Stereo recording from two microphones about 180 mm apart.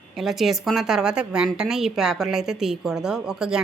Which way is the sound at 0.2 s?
Centre (ahead or behind).